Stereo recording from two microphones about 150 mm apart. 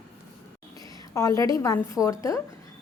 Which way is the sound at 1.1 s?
20° left (ahead or behind).